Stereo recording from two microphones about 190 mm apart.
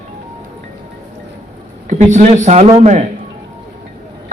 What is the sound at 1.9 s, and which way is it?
Speech, 40° right (ahead or behind).